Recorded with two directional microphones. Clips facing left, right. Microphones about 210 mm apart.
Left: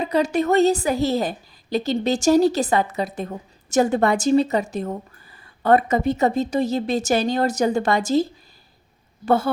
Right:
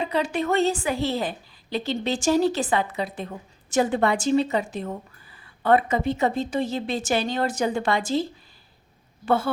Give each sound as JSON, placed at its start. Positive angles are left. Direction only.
{"t": 0.0, "sound": "a woman's voice", "side_deg": 40}